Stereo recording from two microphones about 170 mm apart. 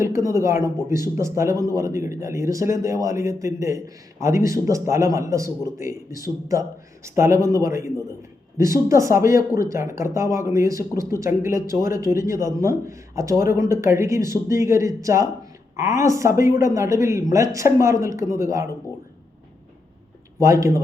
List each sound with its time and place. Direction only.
0.0 s speech: 20° right (ahead or behind)
20.4 s speech: 15° right (ahead or behind)